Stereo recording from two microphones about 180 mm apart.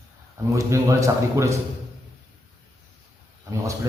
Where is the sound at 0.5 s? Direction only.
15° right (ahead or behind).